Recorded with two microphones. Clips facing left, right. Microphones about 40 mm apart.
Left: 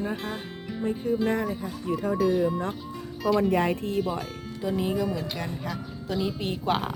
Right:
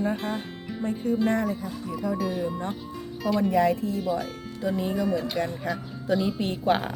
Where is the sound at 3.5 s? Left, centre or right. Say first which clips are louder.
Right 2 dB; left.